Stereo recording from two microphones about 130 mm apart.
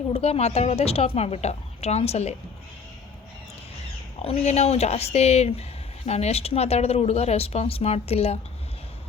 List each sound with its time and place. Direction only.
0.1 s speech: 50° left (ahead or behind)
4.2 s speech: 50° left (ahead or behind)